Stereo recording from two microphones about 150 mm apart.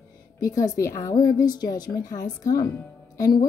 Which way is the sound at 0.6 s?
20° left (ahead or behind).